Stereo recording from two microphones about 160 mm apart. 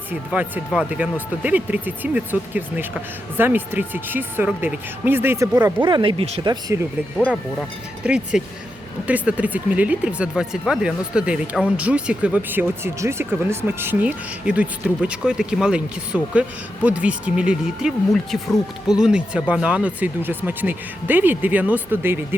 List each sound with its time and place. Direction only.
0.1 s speech: 10° right (ahead or behind); by 6.4 s 40° right (ahead or behind)
6.4 s speech: 25° right (ahead or behind)
8.0 s speech: 5° right (ahead or behind)